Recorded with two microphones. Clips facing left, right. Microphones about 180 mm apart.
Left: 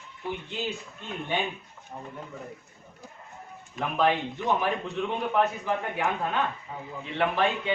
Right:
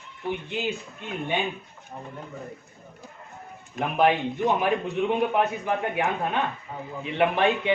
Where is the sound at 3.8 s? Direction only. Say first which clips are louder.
Right 3 dB; 15° right (ahead or behind).